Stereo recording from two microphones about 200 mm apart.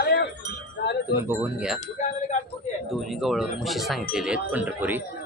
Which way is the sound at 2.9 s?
Centre (ahead or behind).